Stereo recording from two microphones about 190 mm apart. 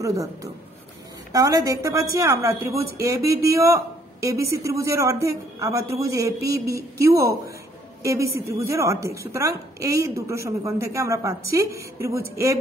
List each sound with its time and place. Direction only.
0.0 s a man's voice: 15° right (ahead or behind)